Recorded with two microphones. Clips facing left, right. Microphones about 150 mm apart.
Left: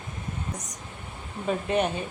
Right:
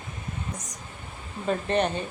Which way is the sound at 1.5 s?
5° left (ahead or behind).